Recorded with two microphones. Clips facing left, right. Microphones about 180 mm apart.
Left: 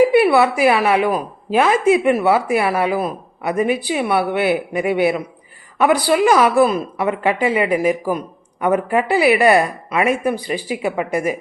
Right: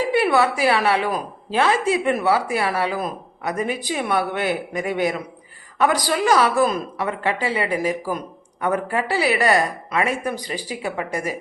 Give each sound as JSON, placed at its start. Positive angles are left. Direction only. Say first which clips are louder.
{"t": 0.0, "sound": "a woman's voice", "louder": "left 6 dB", "side_deg": 10}
{"t": 1.7, "sound": "speech", "louder": "left 6 dB", "side_deg": -35}
{"t": 2.0, "sound": "a woman's voice", "louder": "left 5 dB", "side_deg": 15}